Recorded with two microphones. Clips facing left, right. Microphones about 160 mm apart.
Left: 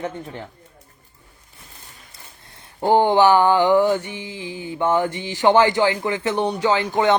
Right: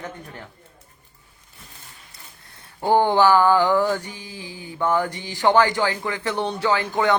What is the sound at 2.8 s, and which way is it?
A woman's voice, 15° left (ahead or behind).